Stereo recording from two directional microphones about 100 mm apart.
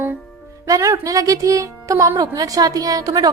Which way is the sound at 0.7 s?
35° right (ahead or behind).